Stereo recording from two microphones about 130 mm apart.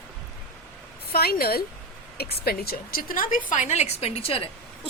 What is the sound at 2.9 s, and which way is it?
A woman's voice, 90° left.